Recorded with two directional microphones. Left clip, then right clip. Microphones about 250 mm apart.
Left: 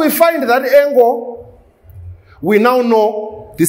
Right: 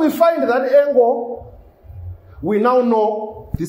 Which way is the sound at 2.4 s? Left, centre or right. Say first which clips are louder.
Left 4 dB; left.